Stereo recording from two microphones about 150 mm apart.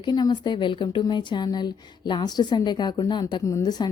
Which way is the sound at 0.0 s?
30° left (ahead or behind).